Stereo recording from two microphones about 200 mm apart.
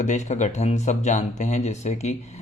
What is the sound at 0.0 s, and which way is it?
Speech, 35° left (ahead or behind).